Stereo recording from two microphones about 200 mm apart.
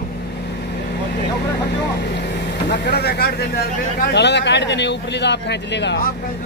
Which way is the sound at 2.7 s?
55° left (ahead or behind).